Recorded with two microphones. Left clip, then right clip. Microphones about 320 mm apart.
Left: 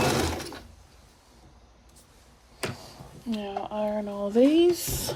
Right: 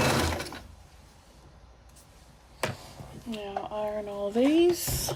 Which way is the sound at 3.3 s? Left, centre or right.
Left.